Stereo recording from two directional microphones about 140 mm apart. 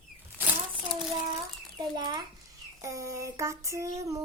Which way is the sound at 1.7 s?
30° right (ahead or behind).